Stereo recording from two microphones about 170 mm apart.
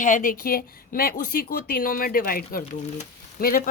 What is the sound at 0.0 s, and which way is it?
A woman's voice, 50° left (ahead or behind).